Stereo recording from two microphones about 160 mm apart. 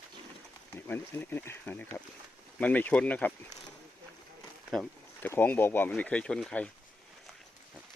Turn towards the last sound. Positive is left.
turn(degrees=5)  # may be behind; listen again after turning